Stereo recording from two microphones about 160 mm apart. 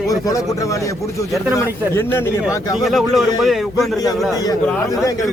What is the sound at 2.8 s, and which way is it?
Speech, centre (ahead or behind).